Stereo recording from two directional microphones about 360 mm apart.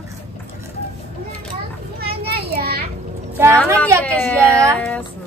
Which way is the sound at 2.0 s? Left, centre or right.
Right.